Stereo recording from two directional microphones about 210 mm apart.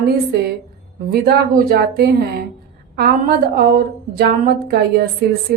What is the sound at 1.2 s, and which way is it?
Speech, 45° right (ahead or behind).